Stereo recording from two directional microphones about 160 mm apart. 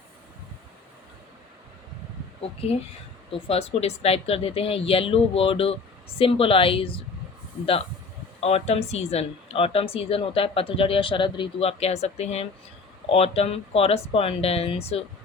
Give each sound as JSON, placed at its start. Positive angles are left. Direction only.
{"t": 3.3, "sound": "speech", "side_deg": 35}
{"t": 8.4, "sound": "speech", "side_deg": 40}